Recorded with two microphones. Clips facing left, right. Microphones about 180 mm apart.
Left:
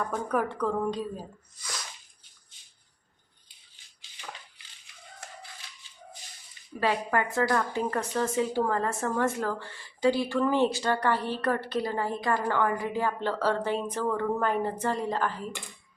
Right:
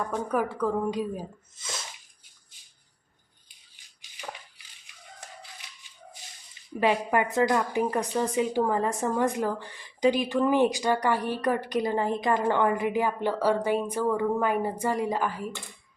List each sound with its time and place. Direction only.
0.3 s a woman's voice: 5° right (ahead or behind)
1.5 s sneeze: 25° right (ahead or behind)
4.0 s a sound: 15° right (ahead or behind)
6.7 s a woman's voice: 20° right (ahead or behind)